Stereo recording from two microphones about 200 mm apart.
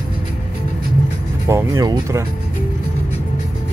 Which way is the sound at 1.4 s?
15° right (ahead or behind).